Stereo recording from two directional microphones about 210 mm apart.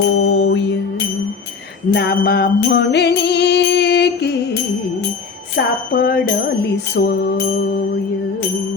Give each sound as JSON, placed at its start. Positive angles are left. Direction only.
{"t": 0.3, "sound": "music", "side_deg": 55}
{"t": 1.9, "sound": "music", "side_deg": 50}
{"t": 5.5, "sound": "music", "side_deg": 45}